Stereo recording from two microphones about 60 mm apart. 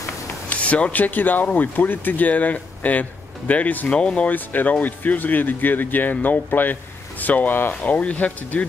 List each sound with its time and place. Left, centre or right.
0.5 s speech: left
7.8 s speech: left